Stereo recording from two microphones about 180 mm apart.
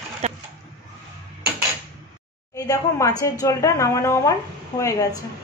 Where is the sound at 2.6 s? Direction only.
20° left (ahead or behind).